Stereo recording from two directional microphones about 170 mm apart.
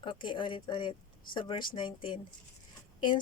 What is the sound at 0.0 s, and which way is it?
A woman's voice, 30° left (ahead or behind).